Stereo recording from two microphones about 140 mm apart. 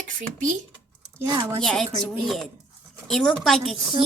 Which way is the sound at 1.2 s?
25° right (ahead or behind).